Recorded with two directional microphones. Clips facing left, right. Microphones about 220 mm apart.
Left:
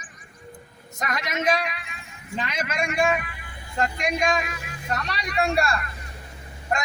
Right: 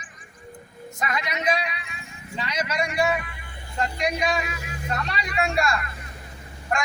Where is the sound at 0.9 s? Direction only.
45° left (ahead or behind).